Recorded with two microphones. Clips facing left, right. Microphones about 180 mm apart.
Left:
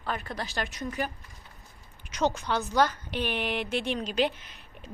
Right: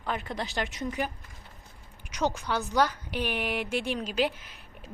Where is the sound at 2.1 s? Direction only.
10° right (ahead or behind).